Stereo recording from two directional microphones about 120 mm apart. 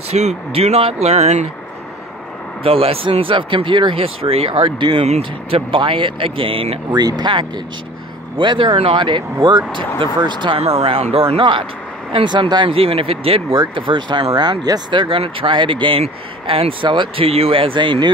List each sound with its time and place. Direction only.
0.1 s speech: 65° right (ahead or behind)
2.6 s speech: 55° right (ahead or behind)
5.0 s speech: 65° right (ahead or behind)
5.7 s speech: 45° right (ahead or behind)
6.9 s speech: 35° right (ahead or behind)
10.6 s speech: 55° right (ahead or behind)